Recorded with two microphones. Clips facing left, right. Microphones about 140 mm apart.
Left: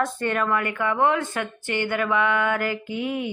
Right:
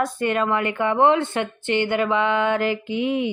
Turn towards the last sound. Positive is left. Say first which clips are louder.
# right 5 dB
turn(degrees=-20)  # may be behind; listen again after turning